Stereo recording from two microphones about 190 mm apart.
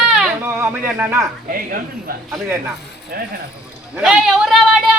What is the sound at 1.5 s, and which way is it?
Speech, 50° right (ahead or behind).